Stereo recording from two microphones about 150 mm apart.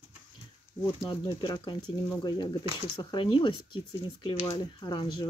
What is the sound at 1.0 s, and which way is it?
Speech, 30° left (ahead or behind).